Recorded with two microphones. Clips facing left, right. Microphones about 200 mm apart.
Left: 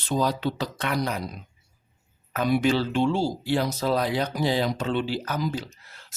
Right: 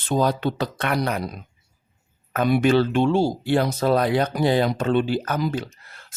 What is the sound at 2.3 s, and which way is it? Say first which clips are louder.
Speech: right 4 dB; 55° right (ahead or behind).